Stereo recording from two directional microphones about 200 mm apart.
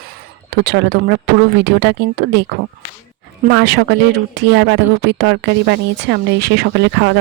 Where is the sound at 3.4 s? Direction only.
55° right (ahead or behind).